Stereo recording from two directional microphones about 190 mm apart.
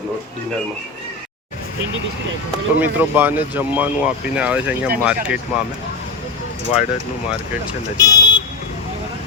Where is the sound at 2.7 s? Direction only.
10° right (ahead or behind).